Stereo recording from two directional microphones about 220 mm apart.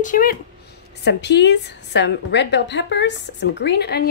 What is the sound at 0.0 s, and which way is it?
Speech, 40° left (ahead or behind).